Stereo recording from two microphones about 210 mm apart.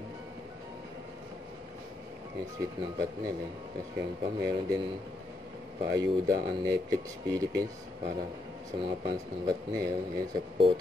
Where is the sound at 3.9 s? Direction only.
15° right (ahead or behind).